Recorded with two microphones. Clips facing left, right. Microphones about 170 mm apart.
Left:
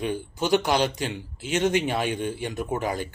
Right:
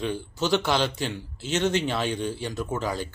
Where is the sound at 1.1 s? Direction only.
10° left (ahead or behind).